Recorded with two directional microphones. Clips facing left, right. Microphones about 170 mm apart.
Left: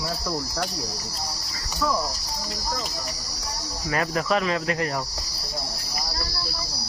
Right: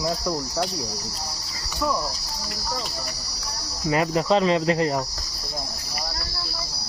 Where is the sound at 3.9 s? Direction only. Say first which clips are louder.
Right 4 dB; 20° right (ahead or behind).